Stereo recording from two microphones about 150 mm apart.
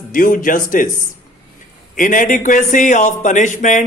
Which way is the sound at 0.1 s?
65° left (ahead or behind).